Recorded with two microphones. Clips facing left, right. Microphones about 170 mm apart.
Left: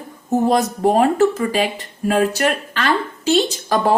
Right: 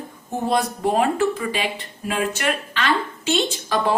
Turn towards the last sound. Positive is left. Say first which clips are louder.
# left 4 dB
turn(degrees=45)  # may be behind; listen again after turning